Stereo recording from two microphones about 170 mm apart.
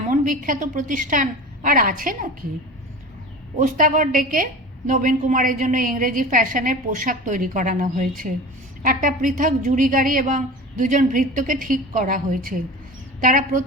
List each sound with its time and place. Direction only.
0.1 s a woman's voice: 50° right (ahead or behind)
3.6 s a woman's voice: 50° right (ahead or behind)